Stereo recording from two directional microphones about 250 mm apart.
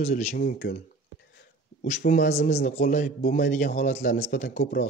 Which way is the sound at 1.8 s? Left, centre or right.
Left.